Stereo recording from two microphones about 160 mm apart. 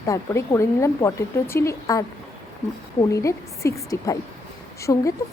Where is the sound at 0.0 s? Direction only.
20° left (ahead or behind).